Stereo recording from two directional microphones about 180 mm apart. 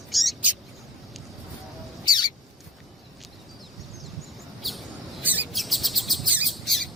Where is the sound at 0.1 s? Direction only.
Centre (ahead or behind).